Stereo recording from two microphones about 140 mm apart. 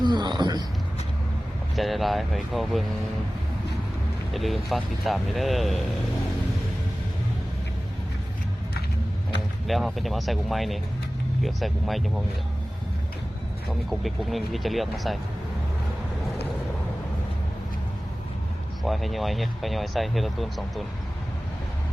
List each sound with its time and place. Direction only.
0.0 s a sound: 30° right (ahead or behind)
1.7 s speech: centre (ahead or behind)
4.4 s speech: centre (ahead or behind)
9.6 s speech: centre (ahead or behind)
13.7 s speech: centre (ahead or behind)
18.9 s speech: centre (ahead or behind)